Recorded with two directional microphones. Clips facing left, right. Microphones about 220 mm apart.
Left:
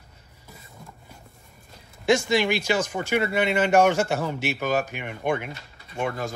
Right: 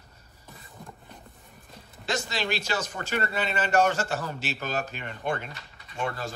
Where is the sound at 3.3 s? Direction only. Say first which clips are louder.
Left 5 dB; 65° left (ahead or behind).